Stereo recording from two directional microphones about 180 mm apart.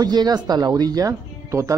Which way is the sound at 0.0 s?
20° right (ahead or behind).